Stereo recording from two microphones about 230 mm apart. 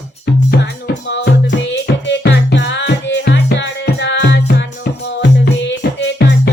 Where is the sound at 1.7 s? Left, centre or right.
Left.